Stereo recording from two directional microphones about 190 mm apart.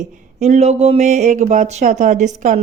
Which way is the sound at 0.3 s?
35° right (ahead or behind).